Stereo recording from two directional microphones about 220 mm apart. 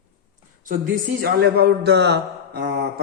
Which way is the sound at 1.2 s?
45° right (ahead or behind).